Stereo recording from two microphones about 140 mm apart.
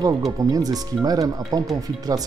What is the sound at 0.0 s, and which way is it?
Speech, 25° right (ahead or behind).